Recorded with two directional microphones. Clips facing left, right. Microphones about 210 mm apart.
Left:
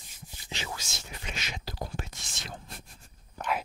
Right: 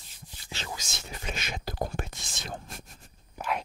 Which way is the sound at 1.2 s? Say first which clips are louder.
Right 4 dB; 50° right (ahead or behind).